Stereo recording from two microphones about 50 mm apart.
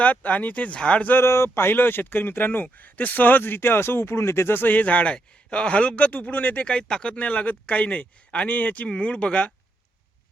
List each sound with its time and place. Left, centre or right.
0.0 s speech: left
1.2 s speech: left
6.7 s speech: centre